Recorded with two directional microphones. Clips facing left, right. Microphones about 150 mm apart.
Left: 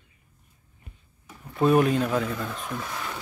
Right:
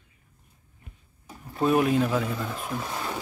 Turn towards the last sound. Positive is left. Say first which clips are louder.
# right 2 dB
turn(degrees=-30)  # may be behind; listen again after turning